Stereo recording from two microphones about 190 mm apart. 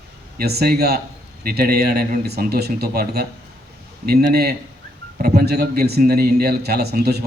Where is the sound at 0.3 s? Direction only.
55° right (ahead or behind).